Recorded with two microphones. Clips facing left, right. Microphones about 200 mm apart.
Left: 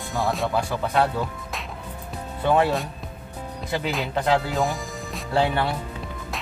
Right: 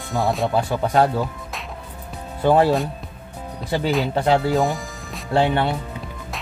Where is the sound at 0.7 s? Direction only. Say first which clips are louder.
Right 4 dB; 35° right (ahead or behind).